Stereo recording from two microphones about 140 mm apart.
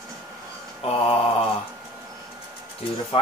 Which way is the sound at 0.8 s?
45° left (ahead or behind).